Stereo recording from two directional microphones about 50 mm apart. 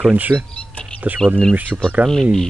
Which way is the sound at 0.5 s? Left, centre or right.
Left.